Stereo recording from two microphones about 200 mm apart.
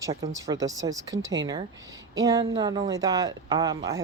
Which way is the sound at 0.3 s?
15° right (ahead or behind).